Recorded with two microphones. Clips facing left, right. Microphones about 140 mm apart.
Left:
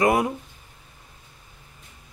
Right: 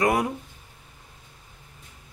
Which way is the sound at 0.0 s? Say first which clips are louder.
Left 2 dB; 25° left (ahead or behind).